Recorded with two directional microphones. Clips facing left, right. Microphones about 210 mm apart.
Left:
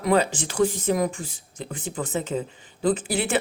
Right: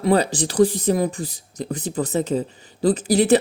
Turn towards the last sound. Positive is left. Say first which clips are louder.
# right 7 dB
turn(degrees=-40)  # may be behind; listen again after turning